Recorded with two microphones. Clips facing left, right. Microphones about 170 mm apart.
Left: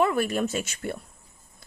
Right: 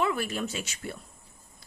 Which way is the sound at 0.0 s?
50° left (ahead or behind).